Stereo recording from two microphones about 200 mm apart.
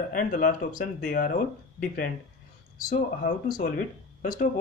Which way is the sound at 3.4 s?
45° left (ahead or behind).